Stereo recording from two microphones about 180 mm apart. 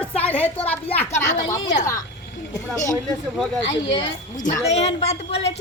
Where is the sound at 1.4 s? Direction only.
20° left (ahead or behind).